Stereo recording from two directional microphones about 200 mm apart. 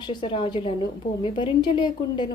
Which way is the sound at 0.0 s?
25° left (ahead or behind).